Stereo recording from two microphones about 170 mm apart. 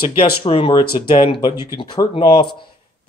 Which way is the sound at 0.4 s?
30° left (ahead or behind).